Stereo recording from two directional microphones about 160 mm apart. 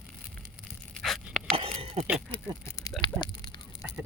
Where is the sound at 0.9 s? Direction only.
Centre (ahead or behind).